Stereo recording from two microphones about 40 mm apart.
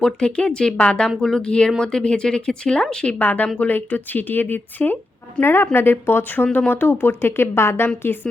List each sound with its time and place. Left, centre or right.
0.0 s speech: left
3.2 s speech: left
5.4 s speech: left
8.0 s a woman's voice: left